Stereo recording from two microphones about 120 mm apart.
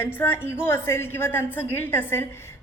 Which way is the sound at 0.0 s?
20° left (ahead or behind).